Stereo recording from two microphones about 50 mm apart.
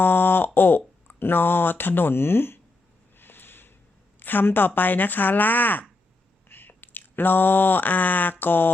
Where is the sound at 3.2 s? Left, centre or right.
Left.